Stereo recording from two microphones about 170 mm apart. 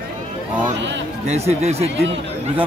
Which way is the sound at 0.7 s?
90° right.